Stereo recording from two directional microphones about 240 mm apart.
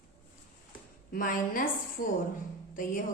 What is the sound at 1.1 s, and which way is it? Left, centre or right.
A woman's voice, left.